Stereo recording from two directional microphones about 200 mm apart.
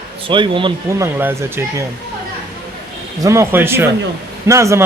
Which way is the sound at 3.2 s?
15° right (ahead or behind).